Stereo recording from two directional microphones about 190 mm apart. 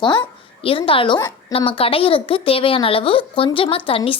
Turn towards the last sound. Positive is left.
turn(degrees=30)  # may be behind; listen again after turning